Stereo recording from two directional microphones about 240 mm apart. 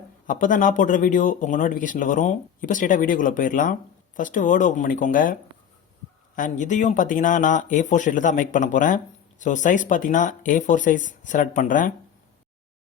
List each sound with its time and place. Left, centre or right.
0.3 s a man's voice: left